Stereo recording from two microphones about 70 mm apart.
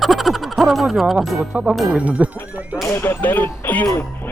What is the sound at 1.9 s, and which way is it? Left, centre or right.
Speech, centre.